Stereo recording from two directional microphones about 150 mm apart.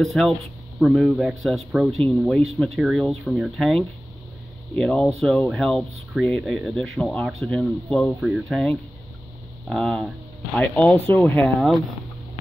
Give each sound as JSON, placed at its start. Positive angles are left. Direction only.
{"t": 0.0, "sound": "speech", "side_deg": 0}
{"t": 11.1, "sound": "speech", "side_deg": 15}